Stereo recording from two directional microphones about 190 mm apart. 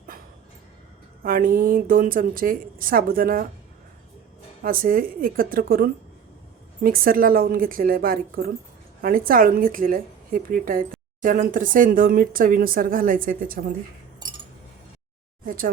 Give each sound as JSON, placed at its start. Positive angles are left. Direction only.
{"t": 1.2, "sound": "speech", "side_deg": -50}
{"t": 4.6, "sound": "speech", "side_deg": -50}
{"t": 15.4, "sound": "speech", "side_deg": -45}